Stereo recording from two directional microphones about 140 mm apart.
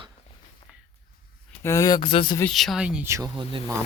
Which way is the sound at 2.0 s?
40° left (ahead or behind).